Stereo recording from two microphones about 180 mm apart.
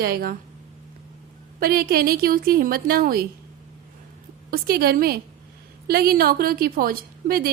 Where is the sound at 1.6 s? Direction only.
55° right (ahead or behind).